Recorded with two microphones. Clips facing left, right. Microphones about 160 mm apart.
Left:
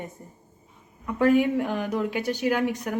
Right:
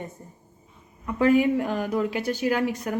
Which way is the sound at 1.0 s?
Centre (ahead or behind).